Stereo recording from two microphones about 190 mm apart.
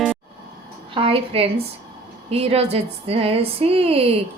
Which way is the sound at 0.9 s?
30° right (ahead or behind).